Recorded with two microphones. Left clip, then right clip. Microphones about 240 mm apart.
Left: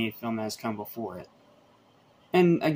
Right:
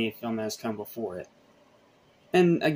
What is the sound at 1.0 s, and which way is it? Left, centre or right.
Speech, left.